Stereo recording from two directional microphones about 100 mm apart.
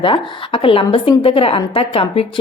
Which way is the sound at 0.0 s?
60° left (ahead or behind).